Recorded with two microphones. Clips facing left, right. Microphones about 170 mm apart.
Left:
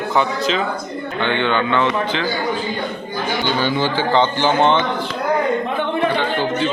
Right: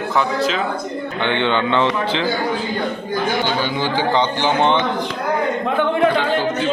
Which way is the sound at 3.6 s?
15° right (ahead or behind).